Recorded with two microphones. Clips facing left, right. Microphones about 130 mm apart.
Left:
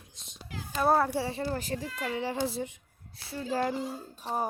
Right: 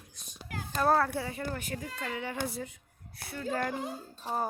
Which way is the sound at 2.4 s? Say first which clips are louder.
Left 4 dB; 25° left (ahead or behind).